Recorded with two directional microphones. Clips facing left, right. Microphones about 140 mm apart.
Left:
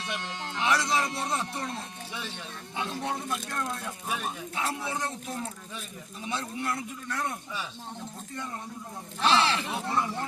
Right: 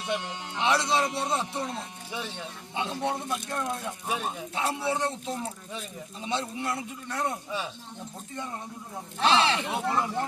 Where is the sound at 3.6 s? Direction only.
15° right (ahead or behind).